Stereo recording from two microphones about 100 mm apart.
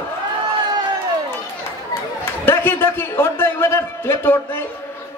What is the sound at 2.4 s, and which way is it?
A man's voice, 25° left (ahead or behind).